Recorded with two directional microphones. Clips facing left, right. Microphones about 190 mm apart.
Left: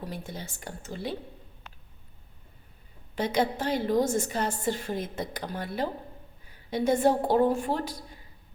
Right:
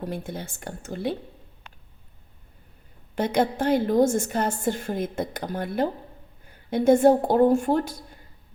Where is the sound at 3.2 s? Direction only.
50° right (ahead or behind).